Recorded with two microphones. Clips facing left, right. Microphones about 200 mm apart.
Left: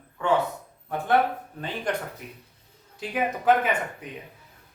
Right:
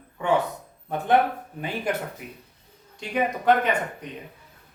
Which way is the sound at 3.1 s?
5° left (ahead or behind).